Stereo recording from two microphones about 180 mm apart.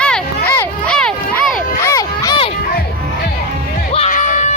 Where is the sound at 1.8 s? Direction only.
15° left (ahead or behind).